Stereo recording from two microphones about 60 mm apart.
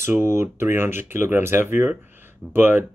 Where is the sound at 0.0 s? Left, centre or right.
Right.